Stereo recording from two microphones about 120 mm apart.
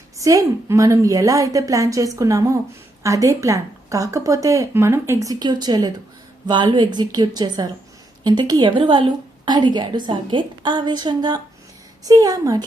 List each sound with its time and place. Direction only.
0.2 s a woman's voice: 25° right (ahead or behind)